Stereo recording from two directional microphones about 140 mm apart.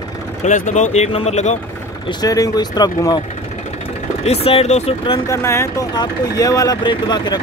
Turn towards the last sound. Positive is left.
turn(degrees=30)  # may be behind; listen again after turning